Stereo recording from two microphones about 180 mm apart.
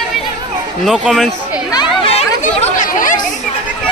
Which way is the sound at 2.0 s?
35° left (ahead or behind).